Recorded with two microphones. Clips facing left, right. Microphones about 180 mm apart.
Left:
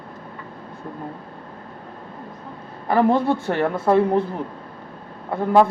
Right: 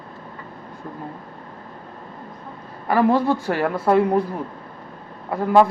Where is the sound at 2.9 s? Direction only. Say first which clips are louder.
Even; 25° left (ahead or behind).